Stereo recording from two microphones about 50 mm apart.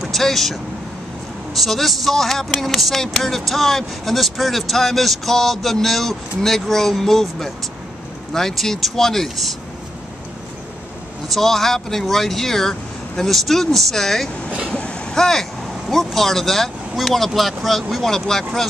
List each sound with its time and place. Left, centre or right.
0.0 s speech: centre
11.3 s speech: centre
14.8 s vehicle: left
15.1 s speech: centre